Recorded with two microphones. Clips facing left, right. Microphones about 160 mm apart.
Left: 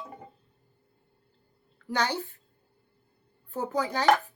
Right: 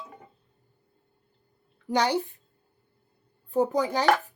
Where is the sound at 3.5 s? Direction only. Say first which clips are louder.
Right 6 dB; 15° right (ahead or behind).